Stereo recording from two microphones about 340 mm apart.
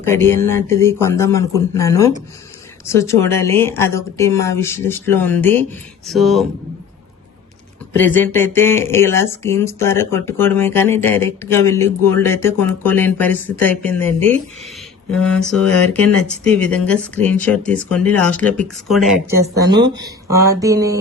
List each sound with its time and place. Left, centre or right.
0.0 s speech: centre
7.9 s speech: centre
15.2 s speech: centre